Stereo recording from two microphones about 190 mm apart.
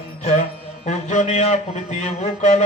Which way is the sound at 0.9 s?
40° left (ahead or behind).